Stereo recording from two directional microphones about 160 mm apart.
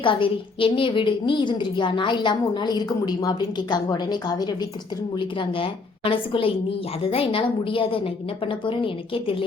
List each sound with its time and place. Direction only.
0.0 s a woman's voice: 30° left (ahead or behind)